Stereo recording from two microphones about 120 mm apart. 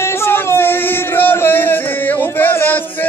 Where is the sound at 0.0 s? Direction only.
20° left (ahead or behind).